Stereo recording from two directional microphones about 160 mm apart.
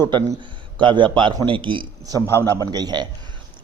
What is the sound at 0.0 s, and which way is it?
A man's voice, 30° right (ahead or behind).